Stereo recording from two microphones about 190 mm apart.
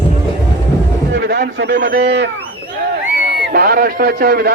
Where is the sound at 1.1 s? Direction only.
60° right (ahead or behind).